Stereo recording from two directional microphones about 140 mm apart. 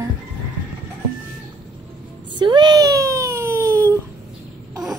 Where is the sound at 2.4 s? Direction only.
30° right (ahead or behind).